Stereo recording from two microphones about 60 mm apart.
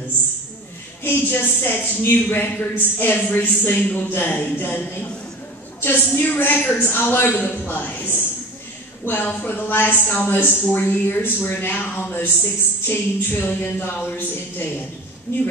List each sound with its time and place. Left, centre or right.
1.0 s speech: left
5.8 s speech: left